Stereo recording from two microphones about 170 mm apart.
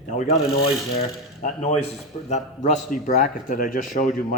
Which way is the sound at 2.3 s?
45° left (ahead or behind).